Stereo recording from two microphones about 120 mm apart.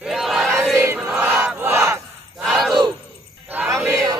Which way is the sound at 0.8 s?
20° right (ahead or behind).